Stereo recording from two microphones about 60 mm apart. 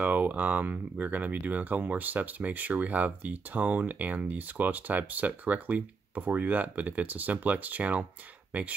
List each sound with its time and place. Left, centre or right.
0.0 s speech: right